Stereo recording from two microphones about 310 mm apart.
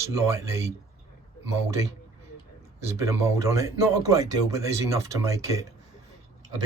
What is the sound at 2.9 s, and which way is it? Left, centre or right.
Speech, centre.